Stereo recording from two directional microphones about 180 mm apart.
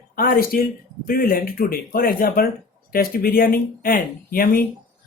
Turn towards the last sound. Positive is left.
turn(degrees=50)  # may be behind; listen again after turning